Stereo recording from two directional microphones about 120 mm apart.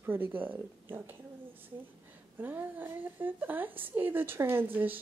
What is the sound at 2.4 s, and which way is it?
A woman's voice, 15° right (ahead or behind).